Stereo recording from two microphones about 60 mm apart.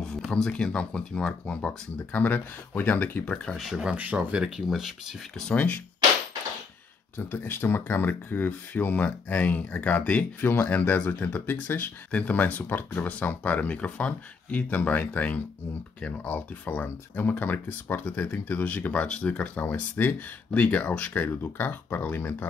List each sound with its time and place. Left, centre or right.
0.3 s speech: centre
2.1 s speech: left
3.5 s speech: centre
3.9 s speech: right
4.6 s speech: centre
5.5 s speech: left
7.2 s speech: left
10.4 s speech: left